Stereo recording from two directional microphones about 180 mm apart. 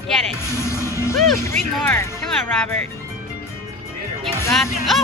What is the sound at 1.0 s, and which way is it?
Music, 15° left (ahead or behind).